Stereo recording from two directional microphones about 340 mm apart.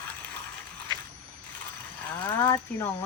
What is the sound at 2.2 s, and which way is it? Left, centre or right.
Speech, centre.